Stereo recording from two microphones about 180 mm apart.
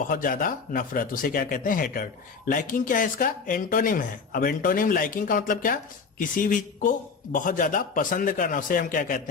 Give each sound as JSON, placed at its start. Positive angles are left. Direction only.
{"t": 0.1, "sound": "speech", "side_deg": 50}